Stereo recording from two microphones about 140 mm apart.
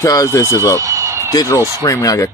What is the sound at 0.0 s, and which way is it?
Speech, 25° left (ahead or behind).